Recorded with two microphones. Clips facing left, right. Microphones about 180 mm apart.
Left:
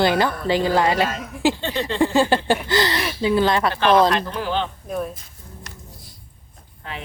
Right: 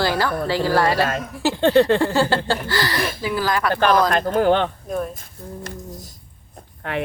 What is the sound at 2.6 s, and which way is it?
Speech, 20° left (ahead or behind).